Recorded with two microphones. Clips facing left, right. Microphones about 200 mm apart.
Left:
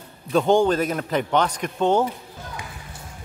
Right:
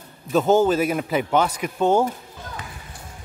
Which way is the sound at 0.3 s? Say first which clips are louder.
Right 1 dB; 5° right (ahead or behind).